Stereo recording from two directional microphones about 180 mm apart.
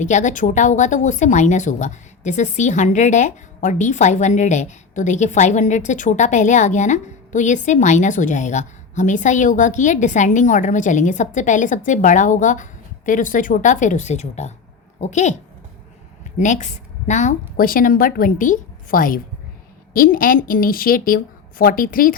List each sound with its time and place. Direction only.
0.0 s speech: 40° left (ahead or behind)
16.4 s speech: 45° left (ahead or behind)